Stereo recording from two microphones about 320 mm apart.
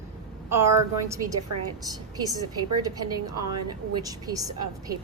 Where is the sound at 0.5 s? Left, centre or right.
Centre.